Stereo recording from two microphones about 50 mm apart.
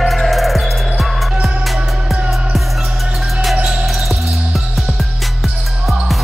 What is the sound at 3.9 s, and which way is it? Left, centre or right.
Music, centre.